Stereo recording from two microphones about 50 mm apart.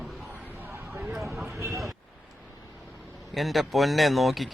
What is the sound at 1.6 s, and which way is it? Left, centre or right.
Vehicle, right.